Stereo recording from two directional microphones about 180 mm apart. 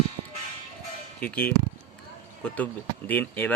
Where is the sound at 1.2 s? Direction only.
10° left (ahead or behind).